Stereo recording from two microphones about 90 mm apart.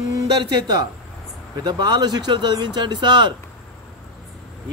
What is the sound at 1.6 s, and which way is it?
Speech, 55° right (ahead or behind).